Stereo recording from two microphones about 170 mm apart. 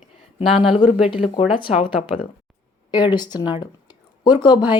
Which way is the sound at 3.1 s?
25° left (ahead or behind).